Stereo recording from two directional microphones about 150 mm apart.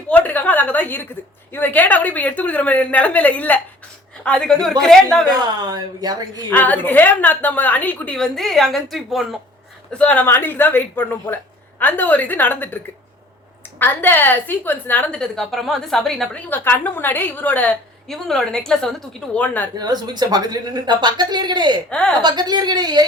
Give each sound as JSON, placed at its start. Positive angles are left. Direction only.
{"t": 0.1, "sound": "a woman's voice", "side_deg": 10}
{"t": 5.3, "sound": "speech", "side_deg": -25}
{"t": 6.5, "sound": "a woman's voice", "side_deg": 10}
{"t": 16.5, "sound": "a woman's voice", "side_deg": 15}
{"t": 19.8, "sound": "speech", "side_deg": -25}
{"t": 21.8, "sound": "a woman's voice", "side_deg": 10}
{"t": 22.2, "sound": "speech", "side_deg": -30}